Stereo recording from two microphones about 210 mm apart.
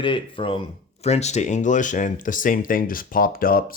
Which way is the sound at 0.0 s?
25° left (ahead or behind).